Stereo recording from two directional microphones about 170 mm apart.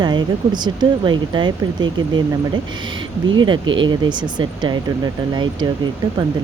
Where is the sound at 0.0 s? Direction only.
25° right (ahead or behind).